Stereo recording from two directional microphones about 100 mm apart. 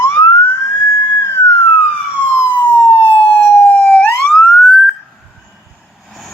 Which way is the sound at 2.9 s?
70° left (ahead or behind).